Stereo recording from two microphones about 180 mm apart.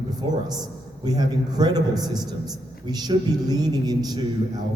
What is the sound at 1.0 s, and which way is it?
A man's voice, 20° right (ahead or behind).